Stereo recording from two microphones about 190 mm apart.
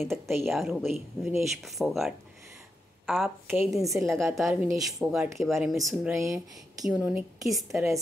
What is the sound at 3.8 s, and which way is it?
Speech, 15° right (ahead or behind).